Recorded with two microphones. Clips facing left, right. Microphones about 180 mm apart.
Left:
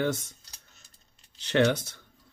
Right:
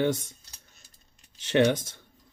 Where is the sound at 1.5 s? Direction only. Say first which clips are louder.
Right 1 dB; 15° right (ahead or behind).